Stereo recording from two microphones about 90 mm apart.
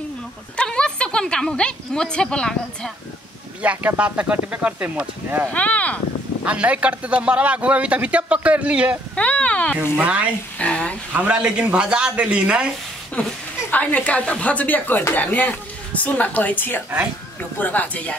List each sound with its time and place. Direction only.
0.6 s a woman's voice: 10° left (ahead or behind)
3.6 s a man's voice: 15° right (ahead or behind)
5.5 s speech: 15° left (ahead or behind)
6.4 s a man's voice: 15° right (ahead or behind)
9.1 s speech: 15° left (ahead or behind)
9.9 s a man's voice: 15° right (ahead or behind)
10.6 s speech: 15° left (ahead or behind)
11.1 s a man's voice: 10° right (ahead or behind)
13.2 s a woman's voice: 15° left (ahead or behind)